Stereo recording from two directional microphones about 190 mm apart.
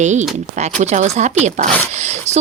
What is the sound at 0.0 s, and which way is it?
Speech, 40° right (ahead or behind).